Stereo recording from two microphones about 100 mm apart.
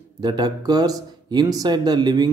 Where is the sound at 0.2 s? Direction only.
40° right (ahead or behind).